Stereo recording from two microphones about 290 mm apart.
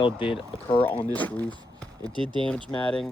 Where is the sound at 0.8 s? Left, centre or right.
Centre.